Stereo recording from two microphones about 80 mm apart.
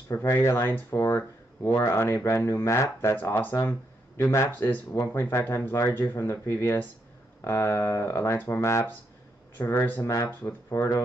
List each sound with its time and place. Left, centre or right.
0.1 s speech: left
4.2 s speech: left
4.5 s speech: left
9.7 s speech: left
10.7 s speech: left